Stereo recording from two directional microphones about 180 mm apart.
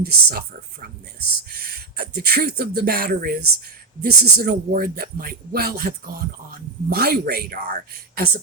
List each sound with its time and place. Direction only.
0.0 s speech: 60° right (ahead or behind)
2.0 s speech: 60° right (ahead or behind)